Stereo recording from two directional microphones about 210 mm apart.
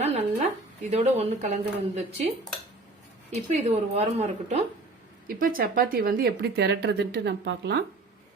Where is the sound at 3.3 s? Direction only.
30° right (ahead or behind); by 7.8 s 55° right (ahead or behind).